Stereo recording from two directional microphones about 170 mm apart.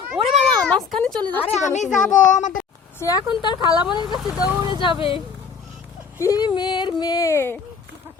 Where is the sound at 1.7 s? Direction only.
45° left (ahead or behind).